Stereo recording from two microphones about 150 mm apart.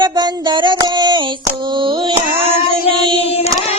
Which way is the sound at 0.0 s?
30° right (ahead or behind).